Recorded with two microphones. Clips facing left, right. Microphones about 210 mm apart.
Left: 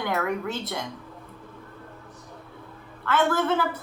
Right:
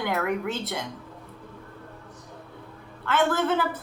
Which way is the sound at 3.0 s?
20° right (ahead or behind).